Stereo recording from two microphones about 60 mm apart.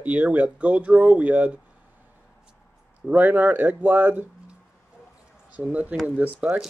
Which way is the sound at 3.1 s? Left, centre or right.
Right.